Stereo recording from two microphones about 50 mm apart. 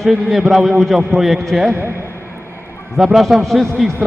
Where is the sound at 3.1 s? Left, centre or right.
Centre.